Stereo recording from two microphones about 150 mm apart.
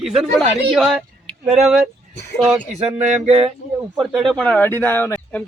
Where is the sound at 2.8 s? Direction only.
45° right (ahead or behind).